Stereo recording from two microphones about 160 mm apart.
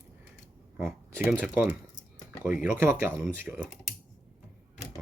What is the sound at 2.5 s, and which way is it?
Speech, 10° right (ahead or behind).